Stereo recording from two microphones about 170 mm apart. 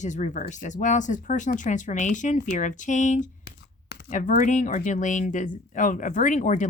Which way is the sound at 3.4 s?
70° left (ahead or behind).